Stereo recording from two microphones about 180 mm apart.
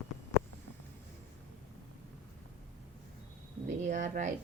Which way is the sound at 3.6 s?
40° right (ahead or behind).